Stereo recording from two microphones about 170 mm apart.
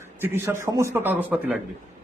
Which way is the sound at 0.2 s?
15° right (ahead or behind).